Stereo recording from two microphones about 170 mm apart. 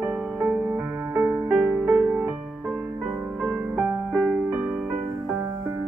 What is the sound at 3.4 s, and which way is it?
Music, 5° right (ahead or behind).